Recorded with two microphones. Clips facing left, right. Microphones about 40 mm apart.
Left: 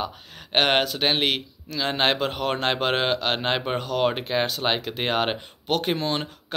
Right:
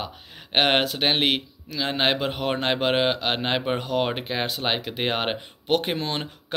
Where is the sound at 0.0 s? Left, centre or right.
Centre.